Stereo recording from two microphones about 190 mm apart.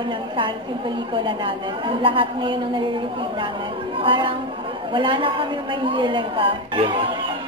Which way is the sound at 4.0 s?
25° right (ahead or behind).